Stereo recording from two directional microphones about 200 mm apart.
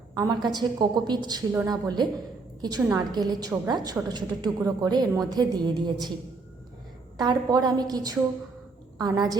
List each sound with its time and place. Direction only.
0.4 s a woman's voice: 20° right (ahead or behind)
7.2 s a woman's voice: 20° right (ahead or behind)